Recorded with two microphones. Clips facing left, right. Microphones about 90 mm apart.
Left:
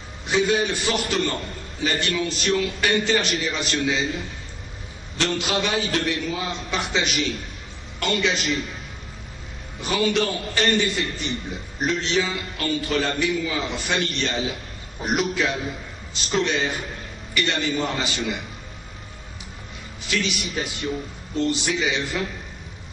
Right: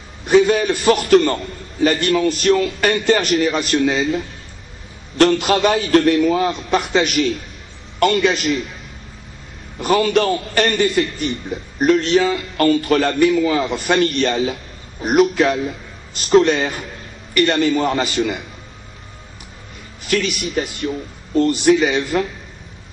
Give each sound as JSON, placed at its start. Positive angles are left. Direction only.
{"t": 0.3, "sound": "a man's voice", "side_deg": -45}
{"t": 5.1, "sound": "a man's voice", "side_deg": -50}
{"t": 9.8, "sound": "a man's voice", "side_deg": -50}
{"t": 20.1, "sound": "a man's voice", "side_deg": -50}
{"t": 21.4, "sound": "a man's voice", "side_deg": -50}